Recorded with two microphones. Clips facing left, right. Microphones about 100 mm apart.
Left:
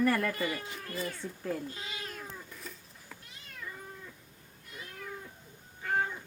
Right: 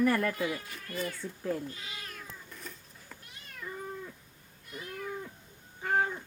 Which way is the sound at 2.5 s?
Centre (ahead or behind).